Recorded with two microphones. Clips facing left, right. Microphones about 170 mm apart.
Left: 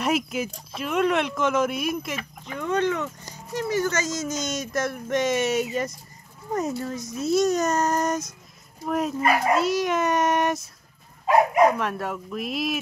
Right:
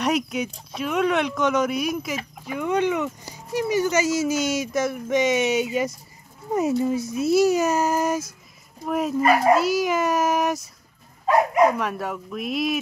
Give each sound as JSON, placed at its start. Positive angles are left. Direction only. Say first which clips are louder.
{"t": 0.0, "sound": "speech", "louder": "right 1 dB", "side_deg": 0}
{"t": 2.4, "sound": "speech", "louder": "right 2 dB", "side_deg": -10}
{"t": 11.8, "sound": "speech", "louder": "right 1 dB", "side_deg": 0}